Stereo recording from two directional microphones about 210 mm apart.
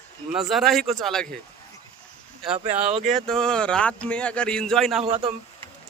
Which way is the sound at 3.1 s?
Centre (ahead or behind).